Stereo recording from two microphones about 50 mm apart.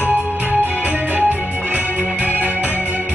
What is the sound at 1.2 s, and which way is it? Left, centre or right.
Music, right.